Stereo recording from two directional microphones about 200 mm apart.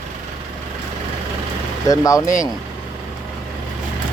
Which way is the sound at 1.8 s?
15° left (ahead or behind).